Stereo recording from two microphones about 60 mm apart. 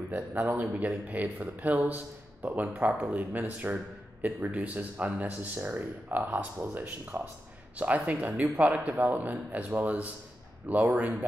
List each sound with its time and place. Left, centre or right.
0.1 s speech: right
1.0 s a man's voice: right